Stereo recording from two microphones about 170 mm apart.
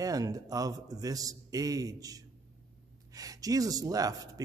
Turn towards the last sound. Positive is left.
turn(degrees=-20)  # may be behind; listen again after turning